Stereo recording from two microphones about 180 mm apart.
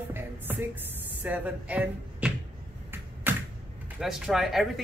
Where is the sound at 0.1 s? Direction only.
10° right (ahead or behind).